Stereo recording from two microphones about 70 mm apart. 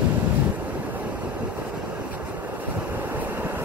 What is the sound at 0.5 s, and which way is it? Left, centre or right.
Waves, right.